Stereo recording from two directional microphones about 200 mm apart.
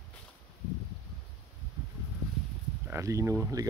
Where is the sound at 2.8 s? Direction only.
15° right (ahead or behind).